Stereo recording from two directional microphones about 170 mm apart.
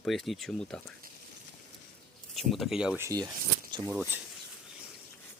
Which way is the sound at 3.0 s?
20° right (ahead or behind).